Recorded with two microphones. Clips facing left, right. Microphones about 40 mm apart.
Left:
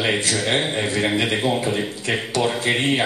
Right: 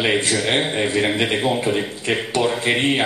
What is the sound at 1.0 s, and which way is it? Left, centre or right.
A man's voice, centre.